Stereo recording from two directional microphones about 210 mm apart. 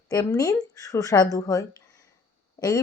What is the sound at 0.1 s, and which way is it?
Speech, 15° left (ahead or behind).